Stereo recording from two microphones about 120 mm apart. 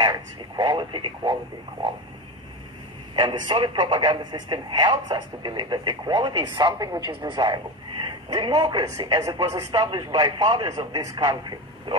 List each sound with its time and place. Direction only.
0.0 s speech: 35° right (ahead or behind)
3.2 s speech: 40° right (ahead or behind)